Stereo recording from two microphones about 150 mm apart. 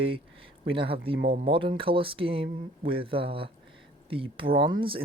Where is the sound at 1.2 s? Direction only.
80° right.